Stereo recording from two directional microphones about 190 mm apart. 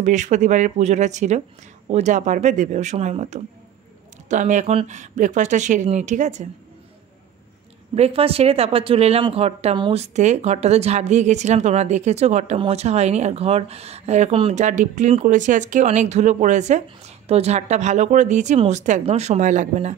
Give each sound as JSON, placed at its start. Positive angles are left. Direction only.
{"t": 0.0, "sound": "speech", "side_deg": -40}
{"t": 7.9, "sound": "speech", "side_deg": -30}